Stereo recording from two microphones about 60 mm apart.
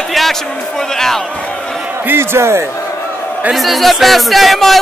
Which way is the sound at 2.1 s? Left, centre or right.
Right.